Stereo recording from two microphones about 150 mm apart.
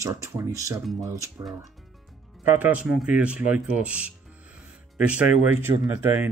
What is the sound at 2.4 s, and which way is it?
Speech, 10° right (ahead or behind).